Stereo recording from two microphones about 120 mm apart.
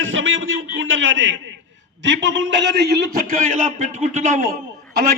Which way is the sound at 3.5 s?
90° right.